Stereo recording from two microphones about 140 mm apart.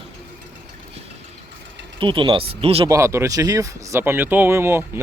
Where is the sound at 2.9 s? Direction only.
20° right (ahead or behind).